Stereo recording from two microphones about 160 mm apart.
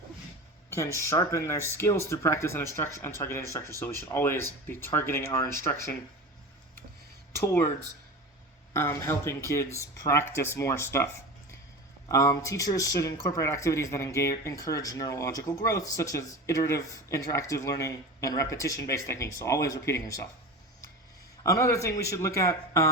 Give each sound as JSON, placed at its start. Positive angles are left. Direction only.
{"t": 0.7, "sound": "speech", "side_deg": 15}
{"t": 7.3, "sound": "speech", "side_deg": 15}
{"t": 8.7, "sound": "speech", "side_deg": 15}
{"t": 21.4, "sound": "speech", "side_deg": 20}